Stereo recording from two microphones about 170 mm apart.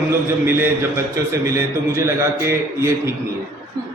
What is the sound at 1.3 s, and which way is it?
A man's voice, 20° right (ahead or behind).